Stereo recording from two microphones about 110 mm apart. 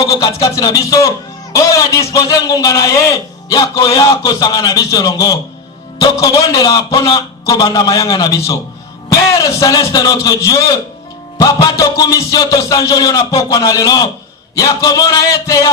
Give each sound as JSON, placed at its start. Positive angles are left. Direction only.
{"t": 0.0, "sound": "a man's voice", "side_deg": 30}